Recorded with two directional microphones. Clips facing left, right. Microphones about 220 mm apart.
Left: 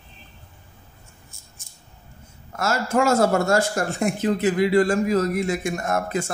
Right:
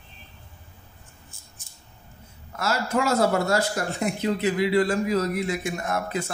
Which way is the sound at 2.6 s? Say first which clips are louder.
Left 3 dB; 45° left (ahead or behind).